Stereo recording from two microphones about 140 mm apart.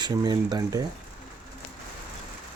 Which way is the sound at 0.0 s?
30° right (ahead or behind).